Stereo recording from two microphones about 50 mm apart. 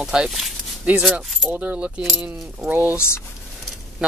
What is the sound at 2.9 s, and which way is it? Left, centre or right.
Speech, left.